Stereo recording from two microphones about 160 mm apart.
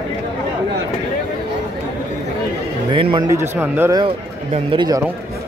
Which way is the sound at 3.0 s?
30° right (ahead or behind).